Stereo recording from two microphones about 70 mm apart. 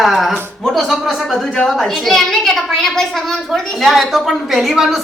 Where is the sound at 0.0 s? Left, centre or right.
Centre.